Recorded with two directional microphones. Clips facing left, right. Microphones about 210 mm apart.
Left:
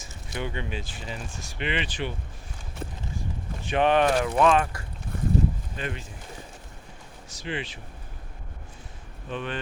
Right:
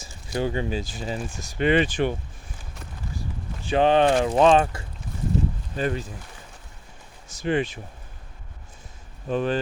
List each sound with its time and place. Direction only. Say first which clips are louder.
0.3 s speech: right 7 dB; 35° right (ahead or behind)
3.7 s speech: right 3 dB; 30° right (ahead or behind)
5.1 s a sound: left 1 dB; 60° left (ahead or behind)
5.7 s speech: right 8 dB; 40° right (ahead or behind)
7.3 s speech: right 9 dB; 50° right (ahead or behind)
9.3 s speech: right 9 dB; 40° right (ahead or behind)